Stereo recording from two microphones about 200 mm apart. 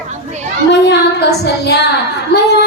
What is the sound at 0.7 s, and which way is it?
Child singing, 60° left (ahead or behind).